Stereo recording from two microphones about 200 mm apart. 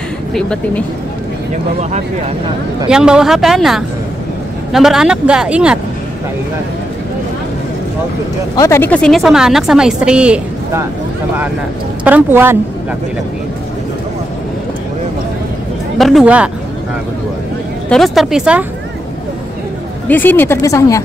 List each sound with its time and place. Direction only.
0.3 s a woman's voice: 5° left (ahead or behind)
1.8 s speech: 35° right (ahead or behind)
2.9 s a woman's voice: 5° right (ahead or behind)
8.5 s a woman's voice: 15° left (ahead or behind); by 10.9 s 10° right (ahead or behind)
12.0 s a woman's voice: 10° right (ahead or behind)
16.0 s a woman's voice: centre (ahead or behind)
17.8 s a woman's voice: centre (ahead or behind)
20.1 s a woman's voice: 10° left (ahead or behind)